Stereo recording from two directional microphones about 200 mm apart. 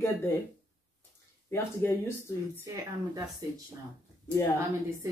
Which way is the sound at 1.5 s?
10° left (ahead or behind).